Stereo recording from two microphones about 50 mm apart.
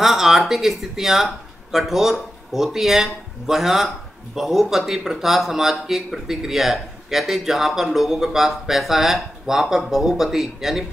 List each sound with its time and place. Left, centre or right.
0.0 s speech: centre